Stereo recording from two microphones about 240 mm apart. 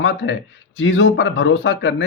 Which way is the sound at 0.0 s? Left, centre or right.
Left.